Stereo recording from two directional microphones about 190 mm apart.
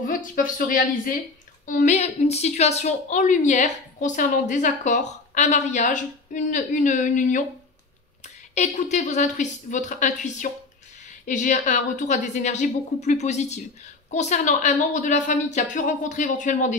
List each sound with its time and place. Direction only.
0.0 s a woman's voice: 45° left (ahead or behind)
8.5 s a woman's voice: 40° left (ahead or behind)